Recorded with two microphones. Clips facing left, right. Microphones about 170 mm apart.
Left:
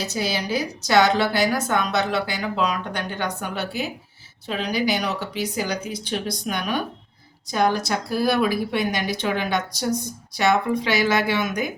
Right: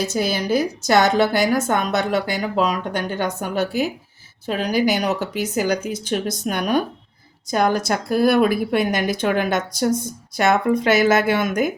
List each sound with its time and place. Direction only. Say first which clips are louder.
0.1 s a woman's voice: right 5 dB; 50° right (ahead or behind)